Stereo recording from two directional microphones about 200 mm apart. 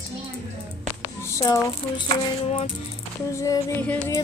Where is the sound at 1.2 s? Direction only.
15° left (ahead or behind).